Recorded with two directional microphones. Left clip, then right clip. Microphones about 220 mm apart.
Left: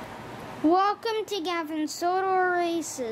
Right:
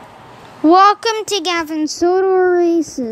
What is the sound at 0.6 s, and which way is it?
A child's voice, 20° right (ahead or behind).